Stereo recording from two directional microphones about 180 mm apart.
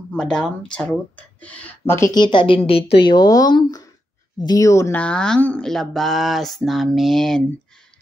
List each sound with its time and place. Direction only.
0.1 s speech: 5° left (ahead or behind)